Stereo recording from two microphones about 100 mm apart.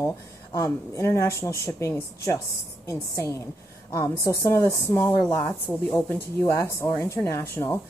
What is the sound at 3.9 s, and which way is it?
Speech, 30° left (ahead or behind).